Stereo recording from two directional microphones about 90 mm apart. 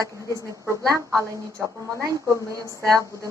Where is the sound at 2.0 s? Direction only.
40° right (ahead or behind).